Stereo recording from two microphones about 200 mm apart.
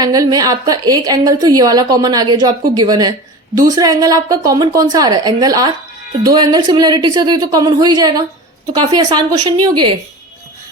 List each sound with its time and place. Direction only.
0.0 s a woman's voice: 20° right (ahead or behind)